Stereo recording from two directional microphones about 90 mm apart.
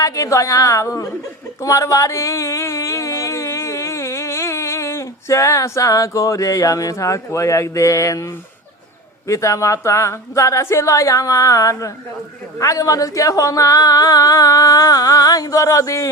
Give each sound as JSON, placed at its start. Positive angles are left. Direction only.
{"t": 0.0, "sound": "speech", "side_deg": 40}
{"t": 1.6, "sound": "a sound", "side_deg": 35}
{"t": 9.2, "sound": "speech", "side_deg": 35}